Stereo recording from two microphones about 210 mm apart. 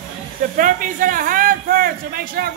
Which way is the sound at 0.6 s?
40° right (ahead or behind).